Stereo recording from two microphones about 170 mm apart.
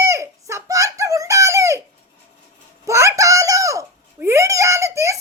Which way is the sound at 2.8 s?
15° right (ahead or behind).